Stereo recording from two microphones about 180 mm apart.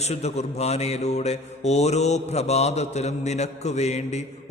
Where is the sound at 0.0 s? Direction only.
35° left (ahead or behind).